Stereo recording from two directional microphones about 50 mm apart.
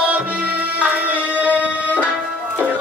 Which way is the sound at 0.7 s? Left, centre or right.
Right.